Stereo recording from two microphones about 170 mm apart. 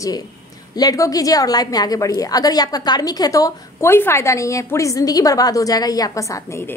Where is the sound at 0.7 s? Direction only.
20° left (ahead or behind).